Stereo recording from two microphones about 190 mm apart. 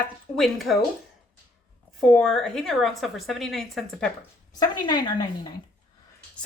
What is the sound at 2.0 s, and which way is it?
A woman's voice, 5° left (ahead or behind).